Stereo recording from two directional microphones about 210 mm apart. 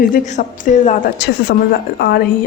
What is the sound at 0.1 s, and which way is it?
Speech, 35° left (ahead or behind).